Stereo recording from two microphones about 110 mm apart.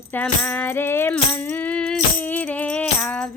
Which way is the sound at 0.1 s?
15° left (ahead or behind).